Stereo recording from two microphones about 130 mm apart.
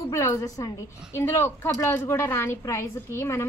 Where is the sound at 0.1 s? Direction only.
20° left (ahead or behind).